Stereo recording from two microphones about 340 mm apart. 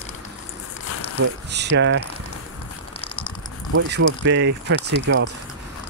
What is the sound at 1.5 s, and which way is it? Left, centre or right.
Speech, right.